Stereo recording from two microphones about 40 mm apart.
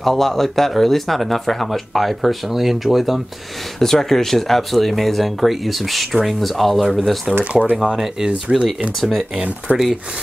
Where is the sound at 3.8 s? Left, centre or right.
Centre.